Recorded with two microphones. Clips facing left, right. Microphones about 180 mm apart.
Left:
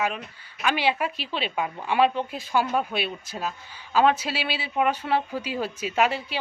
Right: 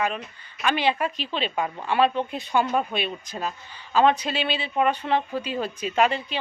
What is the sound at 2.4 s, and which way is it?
A woman's voice, centre (ahead or behind).